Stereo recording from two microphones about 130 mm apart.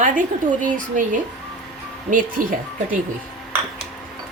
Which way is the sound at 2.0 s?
90° right.